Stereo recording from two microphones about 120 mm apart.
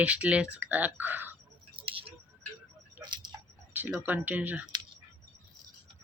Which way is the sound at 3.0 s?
40° right (ahead or behind).